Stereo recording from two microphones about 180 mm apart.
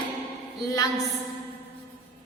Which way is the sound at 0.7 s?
20° left (ahead or behind).